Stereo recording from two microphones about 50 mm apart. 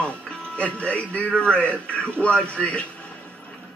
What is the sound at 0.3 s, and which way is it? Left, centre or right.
Speech, left.